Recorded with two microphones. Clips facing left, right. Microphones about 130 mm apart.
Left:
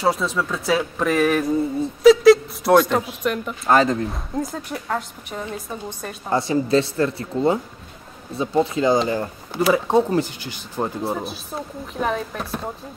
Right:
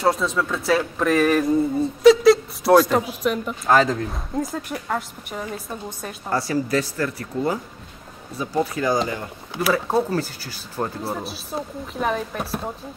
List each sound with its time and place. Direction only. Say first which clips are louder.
0.0 s speech: even; centre (ahead or behind)
6.3 s speech: left 4 dB; 20° left (ahead or behind)
11.0 s speech: left 3 dB; centre (ahead or behind)